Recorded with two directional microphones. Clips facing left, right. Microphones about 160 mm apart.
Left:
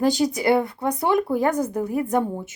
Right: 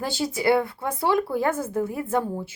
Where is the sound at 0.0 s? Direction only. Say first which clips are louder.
Left 4 dB; 15° left (ahead or behind).